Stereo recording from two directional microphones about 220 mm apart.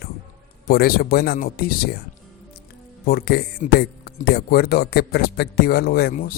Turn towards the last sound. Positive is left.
turn(degrees=40)  # may be behind; listen again after turning